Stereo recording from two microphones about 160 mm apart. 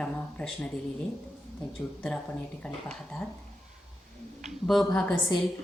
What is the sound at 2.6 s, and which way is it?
Speech, 5° left (ahead or behind).